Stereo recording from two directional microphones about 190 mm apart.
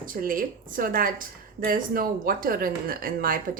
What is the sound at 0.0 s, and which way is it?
A woman's voice, 45° right (ahead or behind).